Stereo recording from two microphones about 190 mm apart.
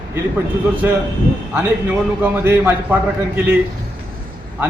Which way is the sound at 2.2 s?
10° right (ahead or behind).